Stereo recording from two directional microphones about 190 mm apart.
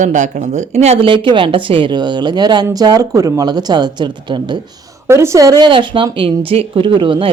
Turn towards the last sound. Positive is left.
turn(degrees=-25)  # may be behind; listen again after turning